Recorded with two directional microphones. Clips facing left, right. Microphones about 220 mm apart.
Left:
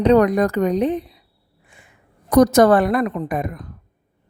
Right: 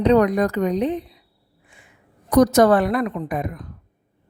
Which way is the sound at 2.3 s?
45° left (ahead or behind).